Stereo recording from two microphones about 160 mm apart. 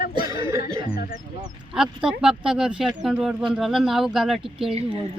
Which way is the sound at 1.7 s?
5° right (ahead or behind).